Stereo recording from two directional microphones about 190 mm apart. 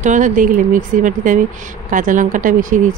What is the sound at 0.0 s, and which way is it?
Speech, 40° right (ahead or behind).